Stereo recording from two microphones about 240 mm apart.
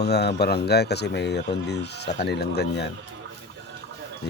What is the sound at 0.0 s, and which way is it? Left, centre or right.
Speech, left.